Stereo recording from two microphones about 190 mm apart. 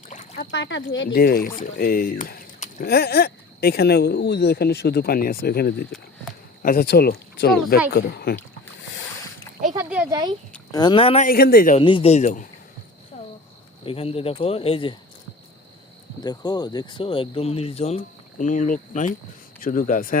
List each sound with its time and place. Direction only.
0.1 s a sound: 40° left (ahead or behind)
0.5 s speech: 75° left (ahead or behind)
1.1 s speech: 50° left (ahead or behind)
9.7 s a sound: 5° right (ahead or behind)
10.1 s speech: 20° right (ahead or behind)
10.7 s speech: 20° left (ahead or behind)
11.3 s speech: 55° left (ahead or behind)
11.8 s speech: 25° left (ahead or behind)
13.1 s a sound: 40° left (ahead or behind)
13.8 s speech: 30° left (ahead or behind)
16.2 s speech: 20° left (ahead or behind); by 20.1 s 45° left (ahead or behind)